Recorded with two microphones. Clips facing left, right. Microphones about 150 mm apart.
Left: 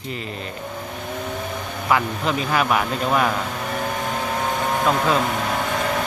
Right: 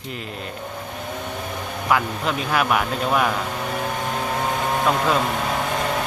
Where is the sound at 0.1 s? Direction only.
Centre (ahead or behind).